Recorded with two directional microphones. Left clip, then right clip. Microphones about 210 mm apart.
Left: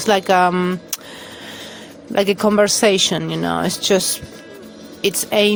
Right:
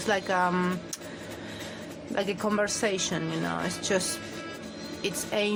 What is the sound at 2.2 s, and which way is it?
A woman's voice, 40° left (ahead or behind).